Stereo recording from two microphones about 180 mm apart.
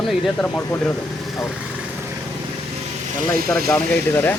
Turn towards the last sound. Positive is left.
turn(degrees=10)  # may be behind; listen again after turning